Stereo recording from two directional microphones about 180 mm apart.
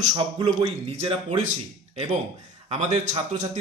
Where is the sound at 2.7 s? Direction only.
40° right (ahead or behind).